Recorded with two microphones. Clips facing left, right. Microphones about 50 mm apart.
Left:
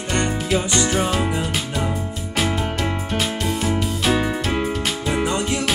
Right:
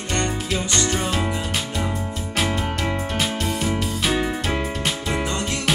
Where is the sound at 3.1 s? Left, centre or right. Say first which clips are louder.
Left 1 dB; centre.